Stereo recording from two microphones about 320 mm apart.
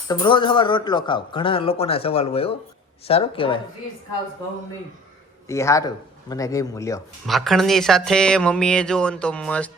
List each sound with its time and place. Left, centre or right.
0.1 s speech: centre
5.5 s speech: centre